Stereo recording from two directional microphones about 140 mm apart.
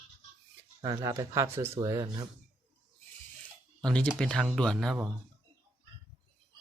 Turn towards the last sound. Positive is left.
turn(degrees=5)  # may be behind; listen again after turning